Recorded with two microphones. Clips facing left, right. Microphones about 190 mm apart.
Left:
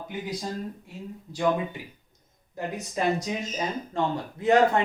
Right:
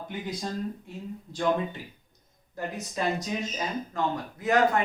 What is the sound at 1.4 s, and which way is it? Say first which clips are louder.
Speech: left 1 dB; 10° left (ahead or behind).